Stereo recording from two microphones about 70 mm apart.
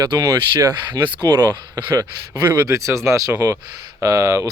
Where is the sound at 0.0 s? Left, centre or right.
Right.